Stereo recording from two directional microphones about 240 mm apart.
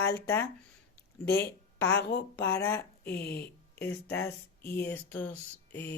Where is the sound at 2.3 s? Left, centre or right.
Centre.